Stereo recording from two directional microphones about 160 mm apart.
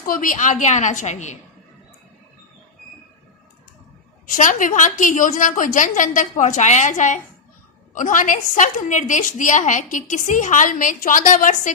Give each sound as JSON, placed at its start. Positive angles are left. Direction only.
{"t": 0.0, "sound": "a woman's voice", "side_deg": 60}
{"t": 4.3, "sound": "a woman's voice", "side_deg": 55}